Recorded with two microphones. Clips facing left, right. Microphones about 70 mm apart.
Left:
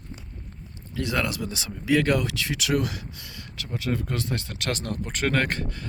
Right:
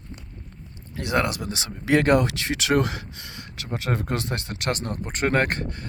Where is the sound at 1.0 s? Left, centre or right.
Right.